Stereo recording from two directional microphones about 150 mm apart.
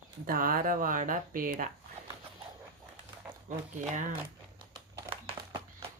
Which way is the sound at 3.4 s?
60° right (ahead or behind).